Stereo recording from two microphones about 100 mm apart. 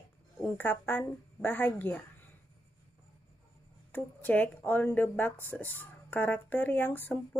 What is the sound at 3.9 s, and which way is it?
Speech, 15° left (ahead or behind).